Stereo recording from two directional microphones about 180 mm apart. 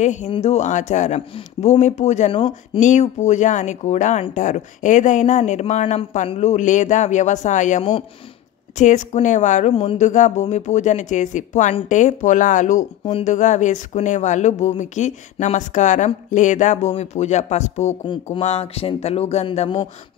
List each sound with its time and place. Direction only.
0.0 s speech: 40° left (ahead or behind)
2.8 s speech: 40° left (ahead or behind)